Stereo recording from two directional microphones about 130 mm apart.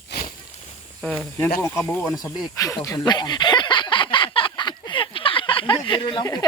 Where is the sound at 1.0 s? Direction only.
10° left (ahead or behind).